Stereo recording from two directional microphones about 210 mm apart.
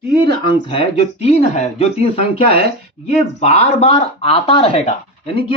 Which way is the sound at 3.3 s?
30° left (ahead or behind).